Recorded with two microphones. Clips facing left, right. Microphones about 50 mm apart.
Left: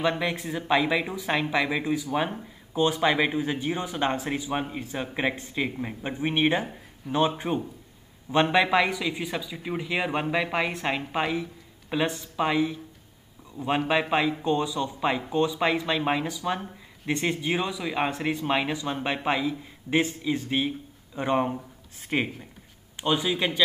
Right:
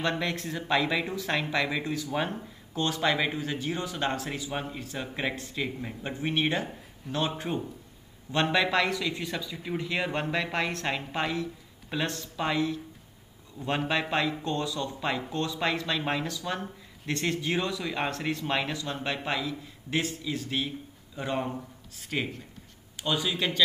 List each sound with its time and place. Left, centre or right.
0.0 s a man's voice: centre